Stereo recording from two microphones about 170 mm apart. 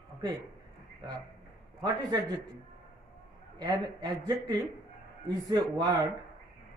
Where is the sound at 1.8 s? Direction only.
25° right (ahead or behind).